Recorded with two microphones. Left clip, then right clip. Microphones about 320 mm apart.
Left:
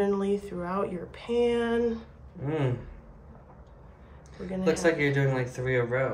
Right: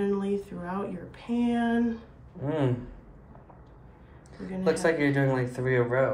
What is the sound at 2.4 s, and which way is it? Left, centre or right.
Speech, centre.